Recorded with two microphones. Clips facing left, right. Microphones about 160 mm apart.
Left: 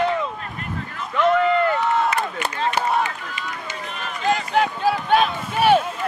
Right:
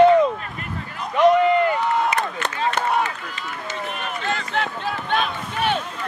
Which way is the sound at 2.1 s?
10° left (ahead or behind).